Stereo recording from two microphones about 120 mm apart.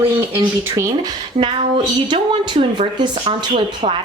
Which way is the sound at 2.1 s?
55° right (ahead or behind).